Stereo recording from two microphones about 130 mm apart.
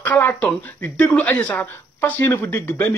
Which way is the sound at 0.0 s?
10° left (ahead or behind).